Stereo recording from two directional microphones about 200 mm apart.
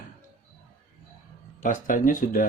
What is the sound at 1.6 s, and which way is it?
Speech, 40° left (ahead or behind).